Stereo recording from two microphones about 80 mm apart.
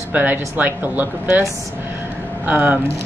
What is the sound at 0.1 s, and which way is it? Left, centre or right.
Speech, right.